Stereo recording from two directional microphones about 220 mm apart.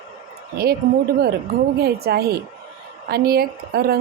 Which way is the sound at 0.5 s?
45° right (ahead or behind).